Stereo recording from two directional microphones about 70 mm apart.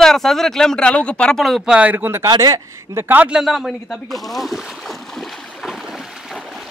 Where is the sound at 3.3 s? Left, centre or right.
Centre.